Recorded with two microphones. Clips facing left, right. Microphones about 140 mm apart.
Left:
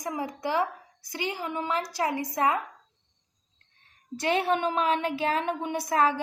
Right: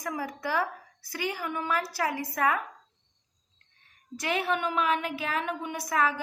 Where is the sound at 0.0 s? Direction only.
20° left (ahead or behind).